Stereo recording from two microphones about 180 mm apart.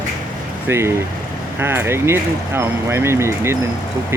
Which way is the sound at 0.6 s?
15° right (ahead or behind).